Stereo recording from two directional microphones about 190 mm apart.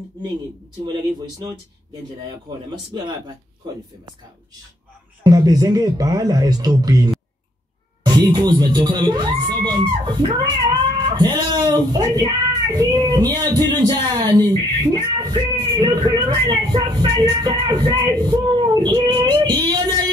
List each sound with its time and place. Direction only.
2.7 s speech: 20° right (ahead or behind)
5.2 s speech: 20° right (ahead or behind)